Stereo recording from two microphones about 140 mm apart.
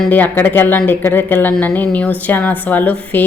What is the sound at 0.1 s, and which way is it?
A woman's voice, 15° left (ahead or behind).